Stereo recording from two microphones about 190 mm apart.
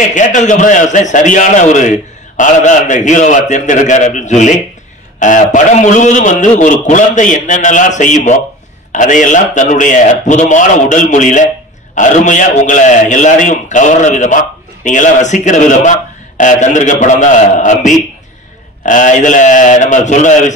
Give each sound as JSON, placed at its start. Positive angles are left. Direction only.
{"t": 0.1, "sound": "a man's voice", "side_deg": 40}